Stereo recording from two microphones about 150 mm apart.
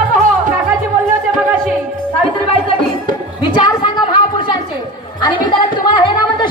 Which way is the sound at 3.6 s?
30° left (ahead or behind).